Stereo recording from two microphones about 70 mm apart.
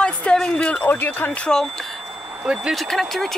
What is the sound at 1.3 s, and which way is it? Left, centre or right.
Speech, centre.